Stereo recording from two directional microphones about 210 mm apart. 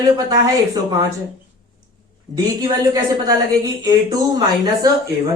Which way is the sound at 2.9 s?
15° right (ahead or behind).